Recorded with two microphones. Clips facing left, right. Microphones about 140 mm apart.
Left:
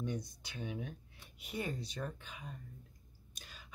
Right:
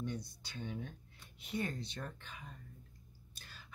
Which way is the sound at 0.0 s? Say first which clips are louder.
Left 2 dB; 15° left (ahead or behind).